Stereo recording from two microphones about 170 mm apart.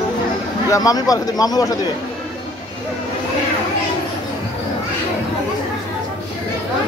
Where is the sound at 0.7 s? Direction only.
20° left (ahead or behind).